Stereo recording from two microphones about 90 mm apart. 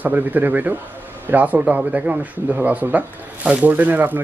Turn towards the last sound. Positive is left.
turn(degrees=-20)  # may be behind; listen again after turning